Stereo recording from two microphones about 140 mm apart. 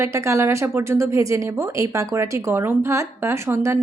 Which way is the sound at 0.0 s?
20° right (ahead or behind).